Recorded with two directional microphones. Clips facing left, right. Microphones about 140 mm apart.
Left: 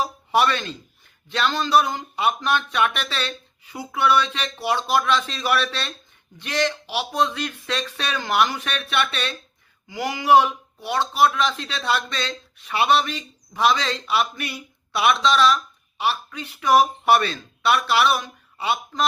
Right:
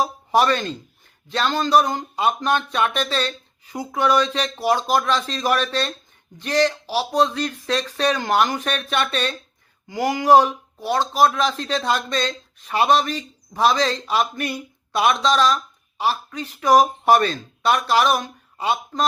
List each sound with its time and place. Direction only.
0.0 s speech: 40° right (ahead or behind)